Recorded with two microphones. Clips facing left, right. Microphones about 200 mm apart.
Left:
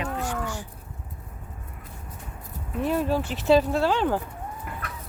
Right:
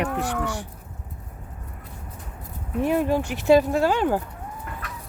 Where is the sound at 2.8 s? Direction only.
15° right (ahead or behind).